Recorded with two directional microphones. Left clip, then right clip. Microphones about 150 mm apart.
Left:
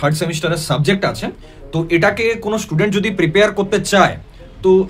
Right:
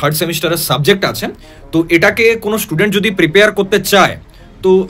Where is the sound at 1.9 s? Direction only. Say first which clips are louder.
Right 4 dB; 20° right (ahead or behind).